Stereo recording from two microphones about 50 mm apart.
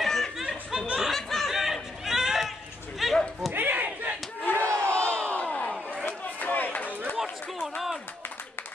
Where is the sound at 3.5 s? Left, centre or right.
Right.